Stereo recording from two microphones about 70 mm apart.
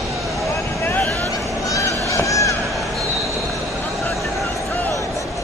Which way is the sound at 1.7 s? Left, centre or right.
Left.